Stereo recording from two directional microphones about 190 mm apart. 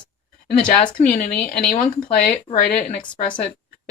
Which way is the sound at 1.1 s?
45° left (ahead or behind).